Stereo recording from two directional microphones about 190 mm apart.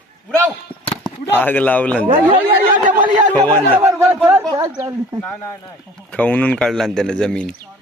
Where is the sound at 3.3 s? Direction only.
10° left (ahead or behind).